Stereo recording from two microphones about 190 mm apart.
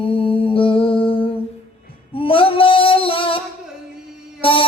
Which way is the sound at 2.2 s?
30° left (ahead or behind).